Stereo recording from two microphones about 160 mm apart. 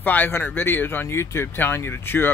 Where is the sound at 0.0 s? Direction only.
10° left (ahead or behind).